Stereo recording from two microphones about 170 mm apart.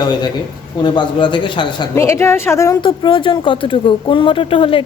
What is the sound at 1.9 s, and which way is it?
A woman's voice, 15° left (ahead or behind).